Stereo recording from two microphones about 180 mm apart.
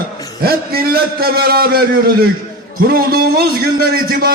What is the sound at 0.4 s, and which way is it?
A man's voice, 55° right (ahead or behind).